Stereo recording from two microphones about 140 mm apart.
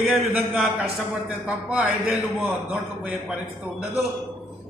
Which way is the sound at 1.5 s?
10° right (ahead or behind).